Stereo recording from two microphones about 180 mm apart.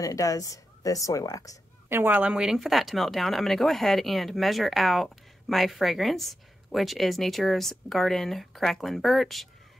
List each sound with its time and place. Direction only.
0.0 s speech: 20° left (ahead or behind)
1.9 s speech: 10° right (ahead or behind)